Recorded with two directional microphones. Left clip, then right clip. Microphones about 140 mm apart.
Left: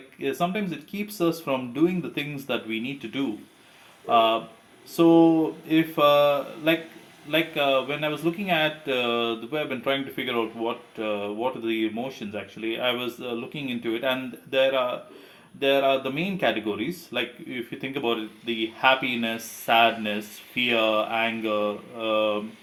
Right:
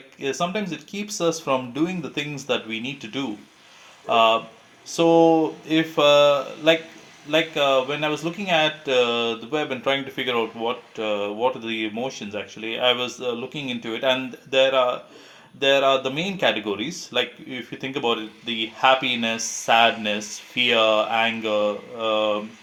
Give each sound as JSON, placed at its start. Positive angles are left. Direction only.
{"t": 0.2, "sound": "speech", "side_deg": -30}